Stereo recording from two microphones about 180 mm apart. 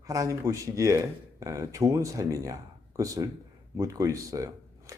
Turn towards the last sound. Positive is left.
turn(degrees=-20)  # may be behind; listen again after turning